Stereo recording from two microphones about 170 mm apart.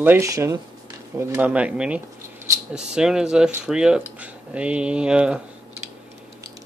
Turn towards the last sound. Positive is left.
turn(degrees=-5)  # may be behind; listen again after turning